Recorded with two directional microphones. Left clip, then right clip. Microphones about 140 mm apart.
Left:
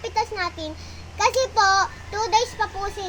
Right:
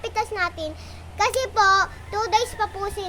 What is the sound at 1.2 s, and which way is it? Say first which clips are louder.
A child's voice: left 1 dB; 25° right (ahead or behind).